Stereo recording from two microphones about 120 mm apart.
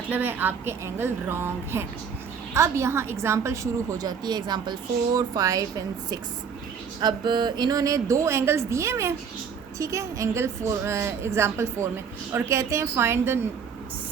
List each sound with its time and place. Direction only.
0.1 s a woman's voice: 15° right (ahead or behind)